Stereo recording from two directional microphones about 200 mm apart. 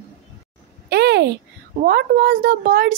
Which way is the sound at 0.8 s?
55° right (ahead or behind).